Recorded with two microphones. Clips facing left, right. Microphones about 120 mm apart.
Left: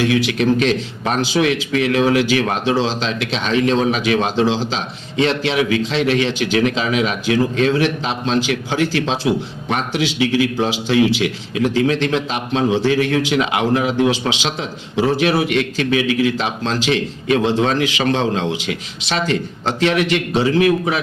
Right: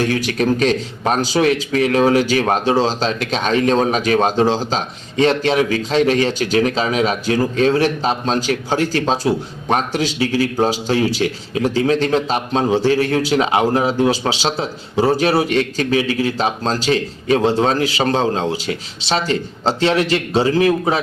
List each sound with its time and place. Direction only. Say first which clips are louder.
0.0 s a man's voice: left 1 dB; 45° right (ahead or behind)